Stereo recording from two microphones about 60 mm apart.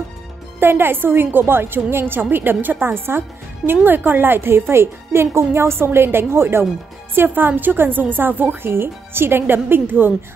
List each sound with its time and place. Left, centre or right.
0.6 s a woman's voice: right